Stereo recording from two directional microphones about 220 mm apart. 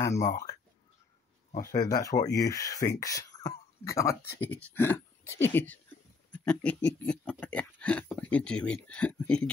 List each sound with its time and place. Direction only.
0.0 s speech: 15° left (ahead or behind)
1.7 s speech: 15° left (ahead or behind)
6.3 s a sound: 5° left (ahead or behind)